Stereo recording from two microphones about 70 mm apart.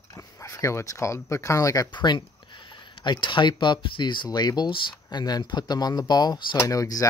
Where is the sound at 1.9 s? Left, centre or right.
Left.